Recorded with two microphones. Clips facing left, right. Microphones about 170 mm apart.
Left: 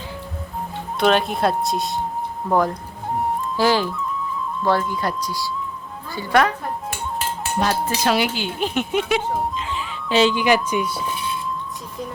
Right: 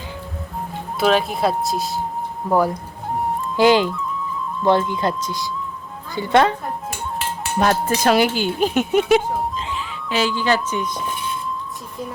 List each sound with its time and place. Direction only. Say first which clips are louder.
0.9 s speech: even; centre (ahead or behind); by 6.6 s 25° right (ahead or behind)
7.6 s speech: right 4 dB; 50° right (ahead or behind)
10.1 s speech: left 3 dB; 25° left (ahead or behind)